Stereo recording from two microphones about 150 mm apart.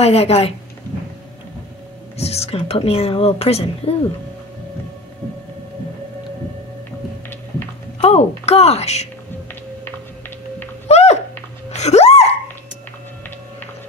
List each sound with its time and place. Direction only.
0.0 s a woman's voice: 45° left (ahead or behind)
2.1 s a woman's voice: 45° left (ahead or behind)
8.0 s a woman's voice: 45° left (ahead or behind)
10.9 s music: 45° left (ahead or behind)
11.7 s a sound: 45° left (ahead or behind)